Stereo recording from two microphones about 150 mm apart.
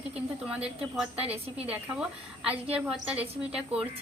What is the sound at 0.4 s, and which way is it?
A woman's voice, 5° right (ahead or behind).